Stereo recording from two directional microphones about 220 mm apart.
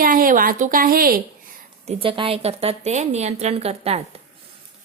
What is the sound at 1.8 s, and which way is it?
A woman's voice, 25° right (ahead or behind).